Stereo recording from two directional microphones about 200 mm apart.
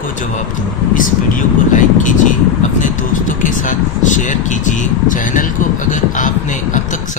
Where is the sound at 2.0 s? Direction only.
40° left (ahead or behind).